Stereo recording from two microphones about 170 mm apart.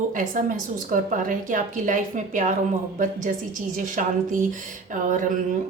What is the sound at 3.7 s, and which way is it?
A woman's voice, 50° right (ahead or behind).